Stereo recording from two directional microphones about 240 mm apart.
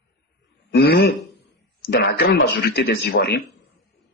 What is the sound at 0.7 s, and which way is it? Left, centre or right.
A man's voice, left.